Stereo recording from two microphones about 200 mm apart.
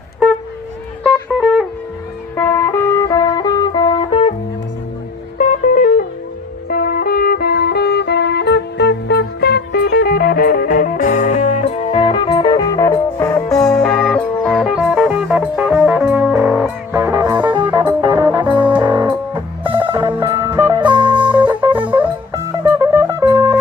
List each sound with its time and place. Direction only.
1.0 s music: centre (ahead or behind); by 4.4 s 30° left (ahead or behind)
5.4 s music: 40° left (ahead or behind); by 13.4 s 10° left (ahead or behind)
13.7 s music: centre (ahead or behind)
16.9 s music: 15° right (ahead or behind)
20.8 s music: 25° right (ahead or behind)
21.5 s music: 10° right (ahead or behind)